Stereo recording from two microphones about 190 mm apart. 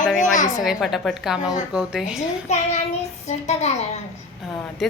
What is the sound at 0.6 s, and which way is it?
Speech, centre (ahead or behind).